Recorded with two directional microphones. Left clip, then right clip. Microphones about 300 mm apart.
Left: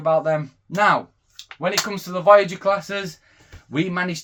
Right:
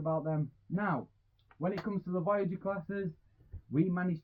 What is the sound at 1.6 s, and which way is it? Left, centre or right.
Speech, centre.